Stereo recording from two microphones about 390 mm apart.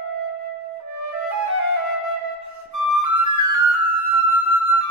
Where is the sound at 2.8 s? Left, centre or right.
Right.